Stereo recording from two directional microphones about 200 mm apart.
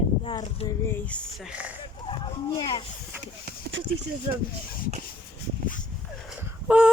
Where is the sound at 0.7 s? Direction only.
10° left (ahead or behind).